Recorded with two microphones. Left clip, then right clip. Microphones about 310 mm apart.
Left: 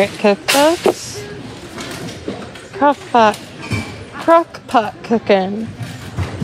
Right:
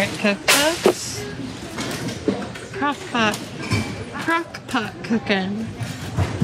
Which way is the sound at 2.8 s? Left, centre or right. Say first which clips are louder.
Left 10 dB; centre.